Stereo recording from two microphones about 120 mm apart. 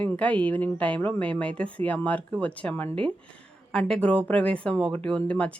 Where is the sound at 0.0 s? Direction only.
10° left (ahead or behind).